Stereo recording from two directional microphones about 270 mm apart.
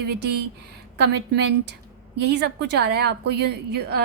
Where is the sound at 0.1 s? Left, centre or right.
Right.